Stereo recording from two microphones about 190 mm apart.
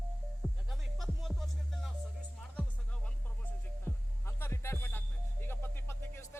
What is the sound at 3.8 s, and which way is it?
Music, 10° left (ahead or behind).